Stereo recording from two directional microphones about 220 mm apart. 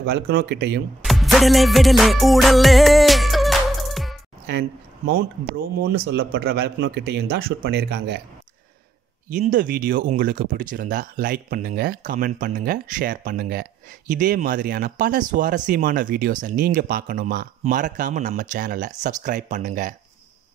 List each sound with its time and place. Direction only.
0.0 s a man's voice: 45° right (ahead or behind)
1.0 s music: centre (ahead or behind)
4.5 s a man's voice: 45° right (ahead or behind)
9.3 s speech: 35° right (ahead or behind)